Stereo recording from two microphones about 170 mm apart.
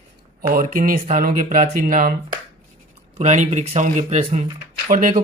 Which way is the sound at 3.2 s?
45° right (ahead or behind).